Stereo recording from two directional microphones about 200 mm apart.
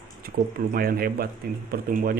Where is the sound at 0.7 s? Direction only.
45° right (ahead or behind).